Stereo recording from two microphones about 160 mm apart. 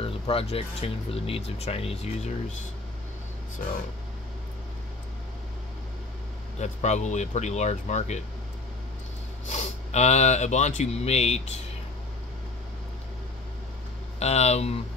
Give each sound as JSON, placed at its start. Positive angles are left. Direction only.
{"t": 0.0, "sound": "speech", "side_deg": 35}
{"t": 6.6, "sound": "speech", "side_deg": 45}
{"t": 9.5, "sound": "speech", "side_deg": 45}
{"t": 14.2, "sound": "speech", "side_deg": 40}